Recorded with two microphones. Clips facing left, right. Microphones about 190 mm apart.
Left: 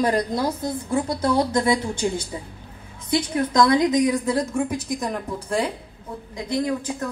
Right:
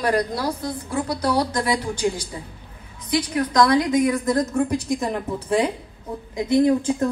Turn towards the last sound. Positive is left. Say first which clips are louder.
# right 7 dB
turn(degrees=-25)  # may be behind; listen again after turning